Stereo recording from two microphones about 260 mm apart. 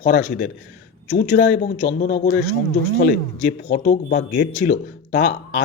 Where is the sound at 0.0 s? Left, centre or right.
Left.